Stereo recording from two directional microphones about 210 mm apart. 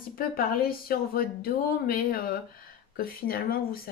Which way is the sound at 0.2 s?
45° left (ahead or behind).